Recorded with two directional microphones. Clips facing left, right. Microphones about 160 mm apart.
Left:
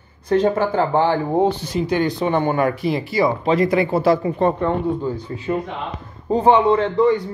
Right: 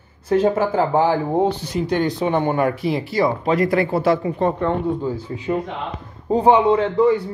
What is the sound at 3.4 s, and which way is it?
Speech, 25° left (ahead or behind).